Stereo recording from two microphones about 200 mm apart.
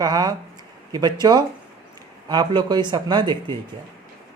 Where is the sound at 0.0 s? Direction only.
20° right (ahead or behind).